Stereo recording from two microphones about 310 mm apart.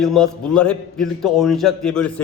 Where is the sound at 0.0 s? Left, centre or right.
Centre.